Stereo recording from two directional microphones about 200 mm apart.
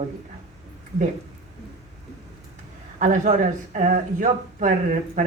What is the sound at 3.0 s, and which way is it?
Speech, 40° right (ahead or behind).